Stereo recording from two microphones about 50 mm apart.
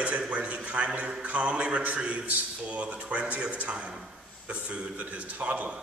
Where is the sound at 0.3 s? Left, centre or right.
Right.